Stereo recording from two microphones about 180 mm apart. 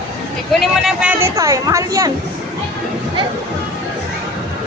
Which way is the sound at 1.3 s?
15° right (ahead or behind).